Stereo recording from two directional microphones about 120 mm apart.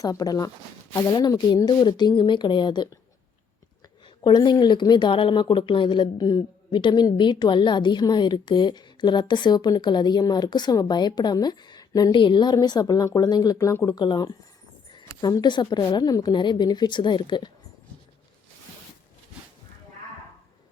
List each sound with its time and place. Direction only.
0.0 s speech: 30° left (ahead or behind)
4.2 s speech: 40° left (ahead or behind)